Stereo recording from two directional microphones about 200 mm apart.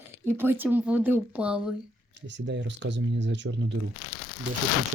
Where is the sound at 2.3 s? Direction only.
60° right (ahead or behind).